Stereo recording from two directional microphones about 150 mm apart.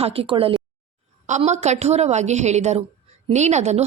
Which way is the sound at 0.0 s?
40° right (ahead or behind).